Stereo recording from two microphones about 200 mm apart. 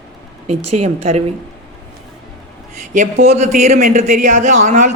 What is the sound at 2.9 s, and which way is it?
Speech, 40° right (ahead or behind).